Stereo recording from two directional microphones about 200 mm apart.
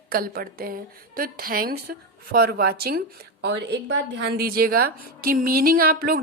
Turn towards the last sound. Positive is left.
turn(degrees=-45)  # may be behind; listen again after turning